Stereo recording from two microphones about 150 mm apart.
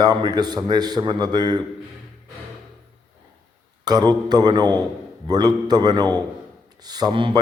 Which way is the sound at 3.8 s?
25° right (ahead or behind).